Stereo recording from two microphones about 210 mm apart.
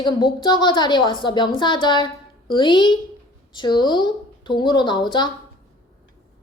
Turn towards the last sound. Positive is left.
turn(degrees=20)  # may be behind; listen again after turning